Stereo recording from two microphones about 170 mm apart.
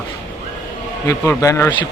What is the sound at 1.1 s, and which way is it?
Speech, 15° left (ahead or behind).